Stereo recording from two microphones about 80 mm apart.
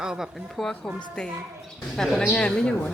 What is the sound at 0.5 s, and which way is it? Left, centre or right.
Speech, centre.